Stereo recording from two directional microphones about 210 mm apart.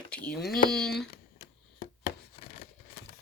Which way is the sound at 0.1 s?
5° left (ahead or behind).